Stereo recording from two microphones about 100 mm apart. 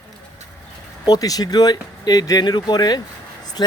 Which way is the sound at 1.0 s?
40° left (ahead or behind).